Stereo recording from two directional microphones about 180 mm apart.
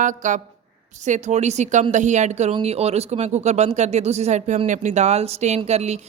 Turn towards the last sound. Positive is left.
turn(degrees=-40)  # may be behind; listen again after turning